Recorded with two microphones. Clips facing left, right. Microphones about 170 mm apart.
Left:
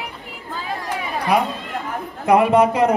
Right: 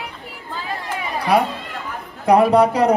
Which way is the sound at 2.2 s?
35° right (ahead or behind).